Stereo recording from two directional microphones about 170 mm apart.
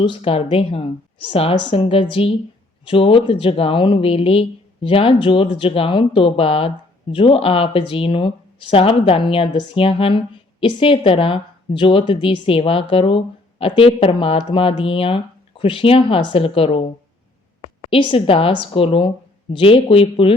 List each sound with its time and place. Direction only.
0.0 s speech: 30° left (ahead or behind)
17.8 s speech: 30° left (ahead or behind)